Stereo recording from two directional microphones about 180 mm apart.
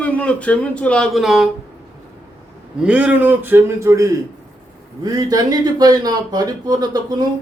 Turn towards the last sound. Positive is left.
turn(degrees=-20)  # may be behind; listen again after turning